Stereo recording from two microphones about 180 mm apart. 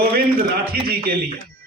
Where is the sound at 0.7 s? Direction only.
55° right (ahead or behind).